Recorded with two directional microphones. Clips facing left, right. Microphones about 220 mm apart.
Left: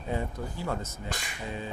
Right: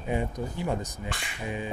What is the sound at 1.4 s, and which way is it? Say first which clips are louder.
Speech: right 4 dB; 15° right (ahead or behind).